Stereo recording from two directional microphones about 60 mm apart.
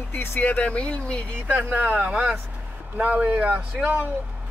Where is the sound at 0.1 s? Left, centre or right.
Left; by 1.2 s centre.